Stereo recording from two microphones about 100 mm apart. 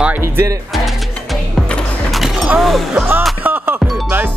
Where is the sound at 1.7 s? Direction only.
Centre (ahead or behind).